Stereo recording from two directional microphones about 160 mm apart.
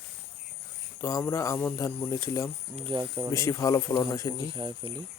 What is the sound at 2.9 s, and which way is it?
Speech, 30° right (ahead or behind).